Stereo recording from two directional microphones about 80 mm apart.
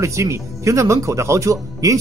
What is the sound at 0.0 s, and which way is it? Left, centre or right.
Speech, right.